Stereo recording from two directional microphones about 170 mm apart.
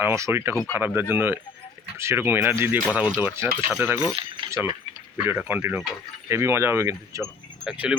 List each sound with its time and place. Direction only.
0.0 s speech: 15° right (ahead or behind)
7.6 s speech: 5° right (ahead or behind)